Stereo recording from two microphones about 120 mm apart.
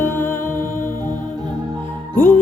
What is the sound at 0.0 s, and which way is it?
Music, 20° left (ahead or behind).